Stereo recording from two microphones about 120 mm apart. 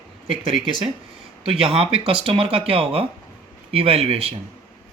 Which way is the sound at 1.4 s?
50° right (ahead or behind).